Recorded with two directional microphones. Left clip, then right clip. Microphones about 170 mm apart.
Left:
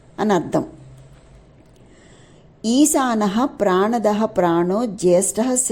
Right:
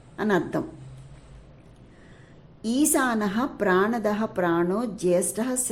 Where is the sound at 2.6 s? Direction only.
25° left (ahead or behind).